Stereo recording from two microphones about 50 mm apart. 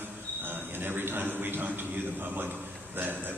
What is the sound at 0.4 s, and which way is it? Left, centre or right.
A man's voice, right.